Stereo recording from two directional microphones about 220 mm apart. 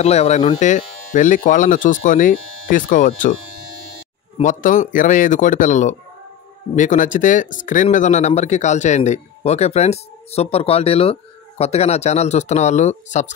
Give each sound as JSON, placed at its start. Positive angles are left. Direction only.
{"t": 0.0, "sound": "speech", "side_deg": 30}
{"t": 4.4, "sound": "speech", "side_deg": 35}